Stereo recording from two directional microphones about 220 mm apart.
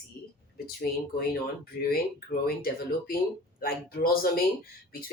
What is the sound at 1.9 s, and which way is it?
Speech, 45° left (ahead or behind).